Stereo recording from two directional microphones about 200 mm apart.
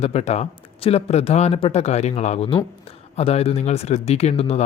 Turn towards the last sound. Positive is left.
turn(degrees=30)  # may be behind; listen again after turning